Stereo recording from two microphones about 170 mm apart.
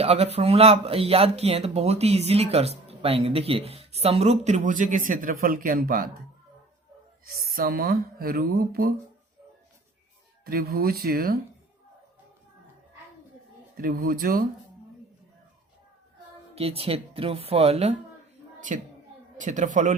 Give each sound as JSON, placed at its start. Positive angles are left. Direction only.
{"t": 0.0, "sound": "speech", "side_deg": -35}
{"t": 7.4, "sound": "speech", "side_deg": -60}
{"t": 10.4, "sound": "speech", "side_deg": -60}
{"t": 13.7, "sound": "speech", "side_deg": -60}
{"t": 16.6, "sound": "speech", "side_deg": -35}
{"t": 19.4, "sound": "a man's voice", "side_deg": -45}